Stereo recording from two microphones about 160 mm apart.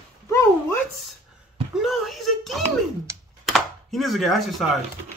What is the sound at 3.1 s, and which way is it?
Computer keyboard, 15° right (ahead or behind).